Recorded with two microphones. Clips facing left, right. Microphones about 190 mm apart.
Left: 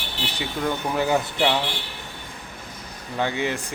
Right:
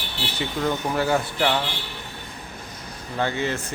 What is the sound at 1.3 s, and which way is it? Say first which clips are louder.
Speech: left 1 dB; 5° left (ahead or behind).